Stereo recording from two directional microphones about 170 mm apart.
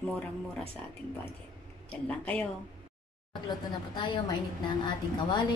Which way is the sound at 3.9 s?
25° left (ahead or behind).